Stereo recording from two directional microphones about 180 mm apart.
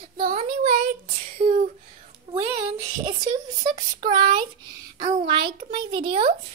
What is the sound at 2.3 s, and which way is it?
A child's voice, 20° right (ahead or behind).